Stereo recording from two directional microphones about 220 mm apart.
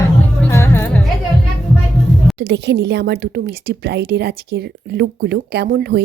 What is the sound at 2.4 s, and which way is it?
Speech, 50° right (ahead or behind).